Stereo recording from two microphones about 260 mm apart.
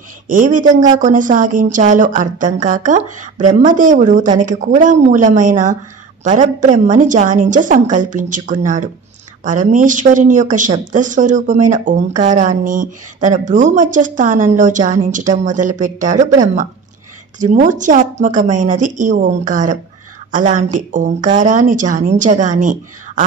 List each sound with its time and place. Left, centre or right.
0.3 s speech: right